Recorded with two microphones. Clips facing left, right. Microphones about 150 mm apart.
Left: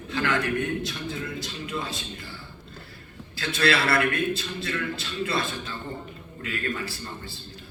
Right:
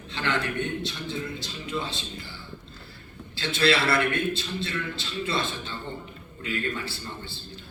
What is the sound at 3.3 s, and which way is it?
A man's voice, 25° right (ahead or behind).